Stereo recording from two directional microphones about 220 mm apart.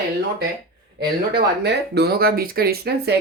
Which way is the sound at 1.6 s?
45° right (ahead or behind).